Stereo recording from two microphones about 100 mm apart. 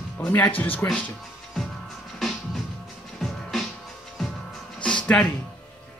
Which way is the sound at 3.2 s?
Centre (ahead or behind).